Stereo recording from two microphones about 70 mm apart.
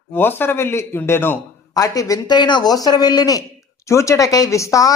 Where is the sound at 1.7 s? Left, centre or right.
Left.